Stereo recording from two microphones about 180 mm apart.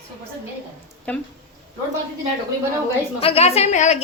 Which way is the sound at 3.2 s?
35° left (ahead or behind).